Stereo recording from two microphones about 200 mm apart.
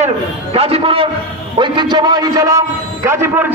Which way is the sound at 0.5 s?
30° right (ahead or behind).